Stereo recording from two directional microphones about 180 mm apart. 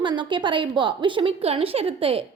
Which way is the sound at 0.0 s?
25° right (ahead or behind).